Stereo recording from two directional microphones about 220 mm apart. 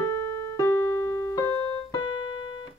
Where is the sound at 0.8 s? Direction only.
60° right (ahead or behind).